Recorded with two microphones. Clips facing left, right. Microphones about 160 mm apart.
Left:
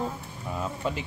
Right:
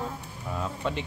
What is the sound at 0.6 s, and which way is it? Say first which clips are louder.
Speech: even; 5° left (ahead or behind).